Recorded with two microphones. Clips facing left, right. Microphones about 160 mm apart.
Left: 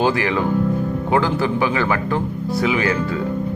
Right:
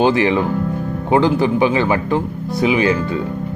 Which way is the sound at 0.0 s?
20° right (ahead or behind).